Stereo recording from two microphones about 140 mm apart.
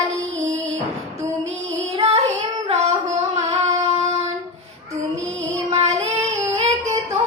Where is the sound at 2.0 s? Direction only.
50° right (ahead or behind).